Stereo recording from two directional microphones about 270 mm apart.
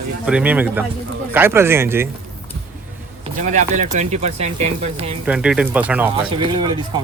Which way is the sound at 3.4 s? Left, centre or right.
Right.